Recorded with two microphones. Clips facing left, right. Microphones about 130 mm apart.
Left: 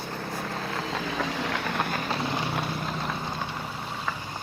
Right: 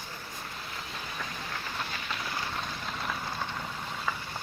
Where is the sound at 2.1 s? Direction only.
25° left (ahead or behind).